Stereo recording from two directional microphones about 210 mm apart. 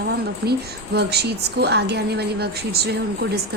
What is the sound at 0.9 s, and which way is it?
A woman's voice, 50° right (ahead or behind).